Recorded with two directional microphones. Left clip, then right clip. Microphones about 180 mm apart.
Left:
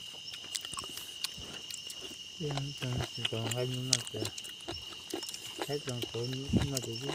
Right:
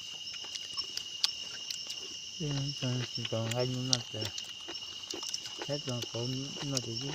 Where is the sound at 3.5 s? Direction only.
45° right (ahead or behind).